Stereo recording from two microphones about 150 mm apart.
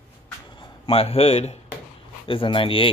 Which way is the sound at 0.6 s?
40° left (ahead or behind).